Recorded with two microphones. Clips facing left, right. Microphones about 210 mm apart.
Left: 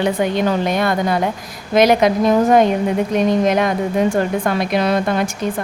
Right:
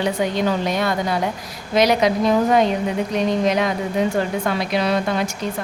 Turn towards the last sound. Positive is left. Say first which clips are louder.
# left 3 dB
turn(degrees=50)  # may be behind; listen again after turning